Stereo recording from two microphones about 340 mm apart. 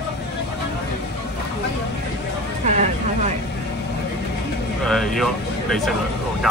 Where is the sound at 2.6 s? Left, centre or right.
Right.